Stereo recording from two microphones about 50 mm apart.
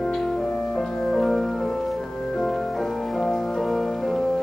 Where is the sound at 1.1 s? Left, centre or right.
Centre.